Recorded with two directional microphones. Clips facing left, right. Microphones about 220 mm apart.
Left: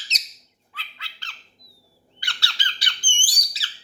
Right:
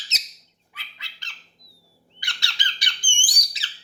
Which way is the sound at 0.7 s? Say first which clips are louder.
Left 4 dB; 15° right (ahead or behind).